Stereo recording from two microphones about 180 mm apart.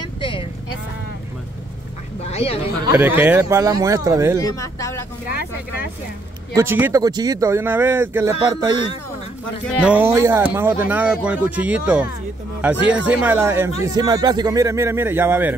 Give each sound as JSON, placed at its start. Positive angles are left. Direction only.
{"t": 0.0, "sound": "vehicle", "side_deg": 30}
{"t": 2.2, "sound": "a sound", "side_deg": 35}
{"t": 3.0, "sound": "speech", "side_deg": -10}
{"t": 4.4, "sound": "speech", "side_deg": 20}
{"t": 6.5, "sound": "speech", "side_deg": -15}
{"t": 9.8, "sound": "speech", "side_deg": -10}